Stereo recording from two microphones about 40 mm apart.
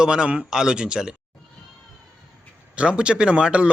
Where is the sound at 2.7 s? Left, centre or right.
Right.